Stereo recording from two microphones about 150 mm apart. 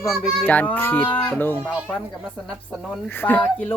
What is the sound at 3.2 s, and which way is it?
Speech, 10° left (ahead or behind).